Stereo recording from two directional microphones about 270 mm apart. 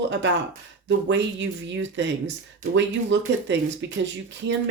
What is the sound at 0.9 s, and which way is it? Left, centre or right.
Speech, right.